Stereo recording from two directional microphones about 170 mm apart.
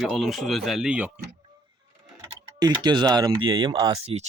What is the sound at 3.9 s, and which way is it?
Speech, 40° right (ahead or behind).